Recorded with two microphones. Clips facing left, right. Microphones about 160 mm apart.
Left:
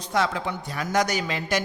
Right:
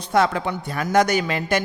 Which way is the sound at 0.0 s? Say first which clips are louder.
Right 5 dB; 55° right (ahead or behind).